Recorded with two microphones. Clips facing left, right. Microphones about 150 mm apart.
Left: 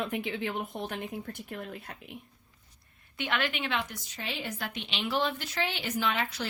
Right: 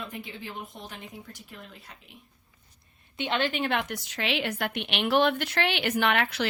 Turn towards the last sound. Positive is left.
turn(degrees=-70)  # may be behind; listen again after turning